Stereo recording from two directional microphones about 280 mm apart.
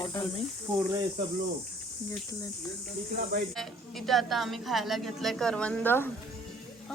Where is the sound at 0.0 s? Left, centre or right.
Centre.